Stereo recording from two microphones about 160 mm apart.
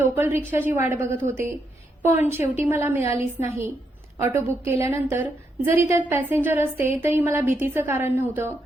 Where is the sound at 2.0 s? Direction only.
15° right (ahead or behind).